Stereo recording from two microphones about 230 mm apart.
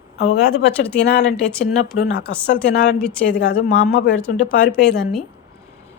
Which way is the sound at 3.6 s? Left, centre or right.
Left.